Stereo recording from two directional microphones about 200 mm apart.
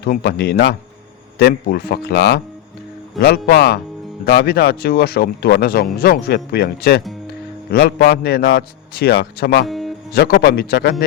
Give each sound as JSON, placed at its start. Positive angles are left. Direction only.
{"t": 0.0, "sound": "speech", "side_deg": 50}
{"t": 9.6, "sound": "music", "side_deg": 0}
{"t": 10.1, "sound": "speech", "side_deg": 50}